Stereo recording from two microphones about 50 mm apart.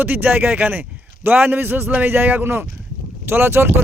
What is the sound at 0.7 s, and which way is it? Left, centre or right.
Speech, right.